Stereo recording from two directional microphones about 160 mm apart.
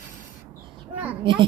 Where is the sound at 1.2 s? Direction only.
30° right (ahead or behind).